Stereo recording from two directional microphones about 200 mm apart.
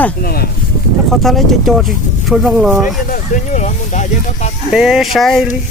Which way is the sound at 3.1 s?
40° left (ahead or behind).